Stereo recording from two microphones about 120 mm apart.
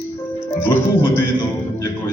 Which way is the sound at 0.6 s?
20° left (ahead or behind).